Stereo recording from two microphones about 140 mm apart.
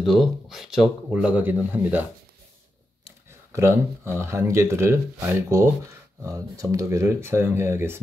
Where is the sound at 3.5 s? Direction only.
20° right (ahead or behind).